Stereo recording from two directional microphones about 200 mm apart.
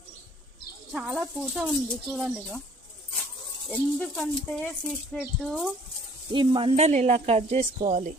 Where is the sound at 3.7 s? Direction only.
5° left (ahead or behind).